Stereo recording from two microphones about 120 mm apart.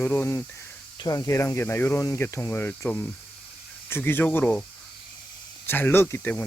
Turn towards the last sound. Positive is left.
turn(degrees=15)  # may be behind; listen again after turning